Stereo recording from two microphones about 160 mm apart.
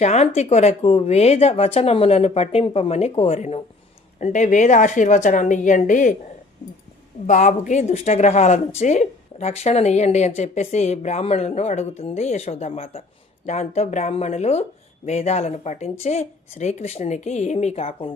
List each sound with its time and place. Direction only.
0.0 s speech: 45° left (ahead or behind)
4.2 s speech: 50° left (ahead or behind)
7.3 s speech: 50° left (ahead or behind)